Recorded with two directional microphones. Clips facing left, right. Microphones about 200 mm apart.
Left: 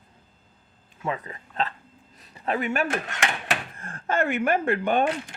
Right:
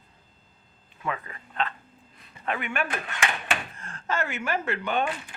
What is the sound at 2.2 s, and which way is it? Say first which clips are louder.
Speech: left 5 dB; 35° left (ahead or behind).